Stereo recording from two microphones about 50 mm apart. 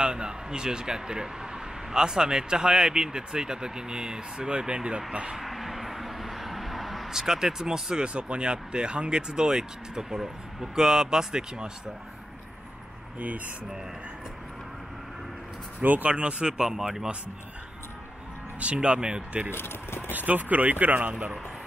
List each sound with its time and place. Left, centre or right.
0.0 s speech: centre
5.4 s vehicle: centre
15.8 s speech: right
16.1 s speech: right
18.6 s speech: right
19.5 s speech: left
20.1 s speech: right